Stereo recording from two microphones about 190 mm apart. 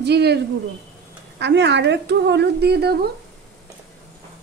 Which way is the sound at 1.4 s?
65° right (ahead or behind).